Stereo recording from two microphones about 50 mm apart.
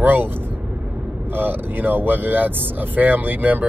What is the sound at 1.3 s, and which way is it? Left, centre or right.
Speech, right.